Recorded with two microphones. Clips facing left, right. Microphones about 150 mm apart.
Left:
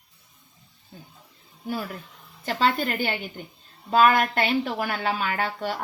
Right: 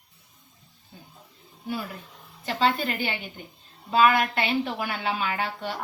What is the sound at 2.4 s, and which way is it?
A woman's voice, 45° left (ahead or behind).